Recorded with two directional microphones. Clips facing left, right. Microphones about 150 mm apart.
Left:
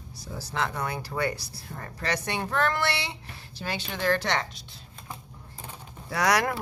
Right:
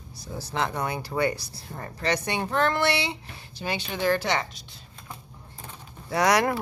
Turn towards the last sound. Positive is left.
turn(degrees=-25)  # may be behind; listen again after turning